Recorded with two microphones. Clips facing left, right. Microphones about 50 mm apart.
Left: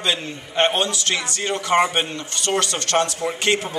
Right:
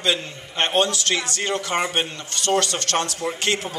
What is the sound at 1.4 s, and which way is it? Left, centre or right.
A man's voice, left.